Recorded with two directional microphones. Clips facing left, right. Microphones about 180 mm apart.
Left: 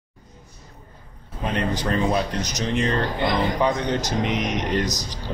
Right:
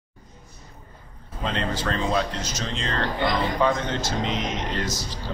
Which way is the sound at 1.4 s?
15° left (ahead or behind).